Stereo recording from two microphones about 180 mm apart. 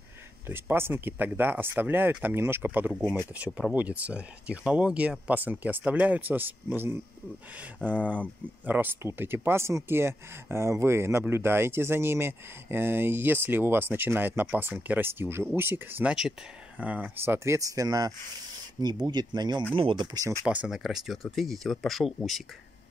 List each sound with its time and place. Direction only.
0.5 s speech: 10° right (ahead or behind)
20.4 s speech: 5° right (ahead or behind)